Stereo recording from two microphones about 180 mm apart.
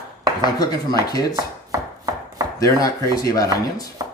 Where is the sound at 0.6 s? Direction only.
20° left (ahead or behind).